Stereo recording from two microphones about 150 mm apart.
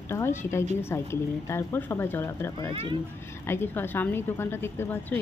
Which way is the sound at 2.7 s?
35° right (ahead or behind).